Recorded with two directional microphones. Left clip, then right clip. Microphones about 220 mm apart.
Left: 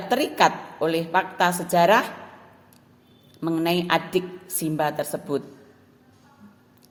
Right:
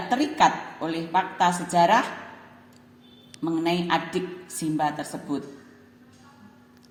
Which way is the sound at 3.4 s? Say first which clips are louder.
Left 2 dB; 55° left (ahead or behind).